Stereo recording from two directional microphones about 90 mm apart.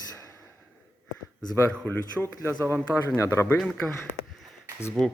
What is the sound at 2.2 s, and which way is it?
Speech, 10° right (ahead or behind).